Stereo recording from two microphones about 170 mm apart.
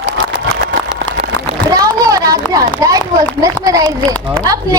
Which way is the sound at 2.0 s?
20° right (ahead or behind).